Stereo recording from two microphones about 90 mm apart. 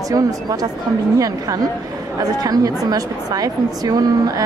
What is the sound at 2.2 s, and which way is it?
A woman's voice, 45° right (ahead or behind).